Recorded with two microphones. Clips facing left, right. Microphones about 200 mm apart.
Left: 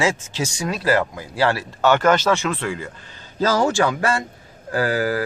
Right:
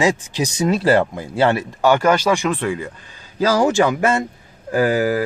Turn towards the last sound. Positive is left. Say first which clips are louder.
# right 4 dB
turn(degrees=-15)  # may be behind; listen again after turning